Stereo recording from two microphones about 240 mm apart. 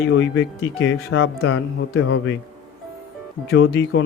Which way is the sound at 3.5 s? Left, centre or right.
Left.